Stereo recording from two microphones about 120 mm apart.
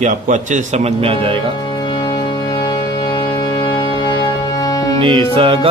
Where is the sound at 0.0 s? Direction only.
85° right; by 1.3 s 55° right (ahead or behind).